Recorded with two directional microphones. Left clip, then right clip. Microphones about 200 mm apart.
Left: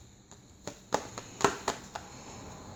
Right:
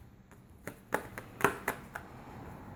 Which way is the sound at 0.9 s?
5° left (ahead or behind).